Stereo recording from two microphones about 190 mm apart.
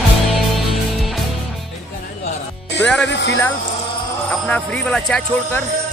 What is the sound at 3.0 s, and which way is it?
Speech, 65° left (ahead or behind).